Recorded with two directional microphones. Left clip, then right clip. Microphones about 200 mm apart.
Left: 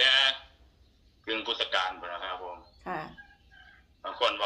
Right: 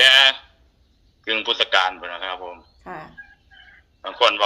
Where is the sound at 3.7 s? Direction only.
50° right (ahead or behind).